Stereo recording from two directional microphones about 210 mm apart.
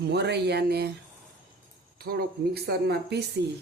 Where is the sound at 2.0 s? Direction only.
50° right (ahead or behind).